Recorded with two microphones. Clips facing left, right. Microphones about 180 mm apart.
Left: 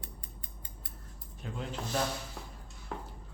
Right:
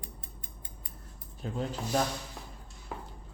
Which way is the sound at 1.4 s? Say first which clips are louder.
Right 5 dB; 35° right (ahead or behind).